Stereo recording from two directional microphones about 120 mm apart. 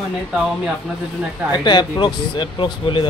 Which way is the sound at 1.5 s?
40° left (ahead or behind).